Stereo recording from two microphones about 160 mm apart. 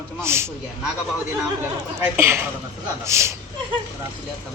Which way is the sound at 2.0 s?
15° right (ahead or behind).